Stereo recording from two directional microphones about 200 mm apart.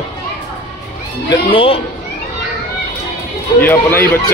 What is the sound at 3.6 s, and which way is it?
Speech, 10° left (ahead or behind).